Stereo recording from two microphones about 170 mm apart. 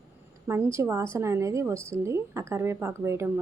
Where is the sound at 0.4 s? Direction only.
15° right (ahead or behind).